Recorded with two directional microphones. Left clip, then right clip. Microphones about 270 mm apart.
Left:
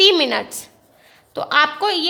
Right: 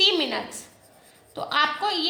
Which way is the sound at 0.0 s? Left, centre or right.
Left.